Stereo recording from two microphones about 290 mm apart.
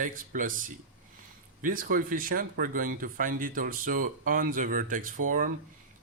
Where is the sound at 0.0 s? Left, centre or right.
Right.